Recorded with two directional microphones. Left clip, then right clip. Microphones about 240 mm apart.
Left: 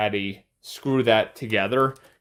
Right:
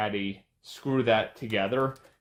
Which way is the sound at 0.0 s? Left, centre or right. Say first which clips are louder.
Left 5 dB; left.